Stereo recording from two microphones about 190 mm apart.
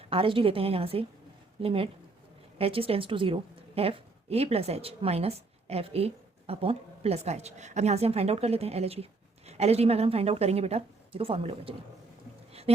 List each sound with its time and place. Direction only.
0.0 s a woman's voice: 30° right (ahead or behind)